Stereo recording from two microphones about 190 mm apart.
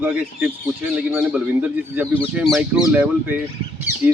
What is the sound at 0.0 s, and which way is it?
Speech, 10° right (ahead or behind).